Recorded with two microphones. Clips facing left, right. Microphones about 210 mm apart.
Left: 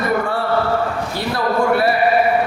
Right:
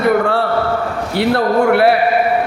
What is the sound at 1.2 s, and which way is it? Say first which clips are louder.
Speech: right 6 dB; 65° right (ahead or behind).